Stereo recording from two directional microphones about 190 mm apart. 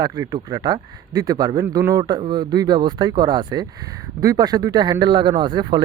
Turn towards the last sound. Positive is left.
turn(degrees=-25)  # may be behind; listen again after turning